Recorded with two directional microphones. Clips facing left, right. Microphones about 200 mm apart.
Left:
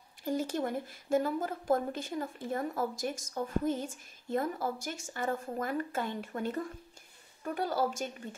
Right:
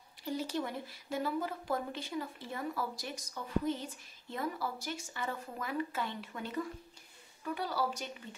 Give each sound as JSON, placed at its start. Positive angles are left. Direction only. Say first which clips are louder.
{"t": 0.2, "sound": "a woman's voice", "louder": "left 4 dB", "side_deg": 45}